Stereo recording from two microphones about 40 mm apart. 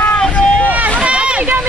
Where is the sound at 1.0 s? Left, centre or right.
Right.